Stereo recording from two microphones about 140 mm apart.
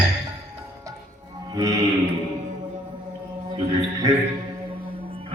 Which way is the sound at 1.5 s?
25° right (ahead or behind).